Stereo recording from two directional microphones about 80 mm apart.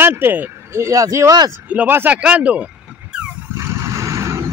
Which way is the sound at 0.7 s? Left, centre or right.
Right.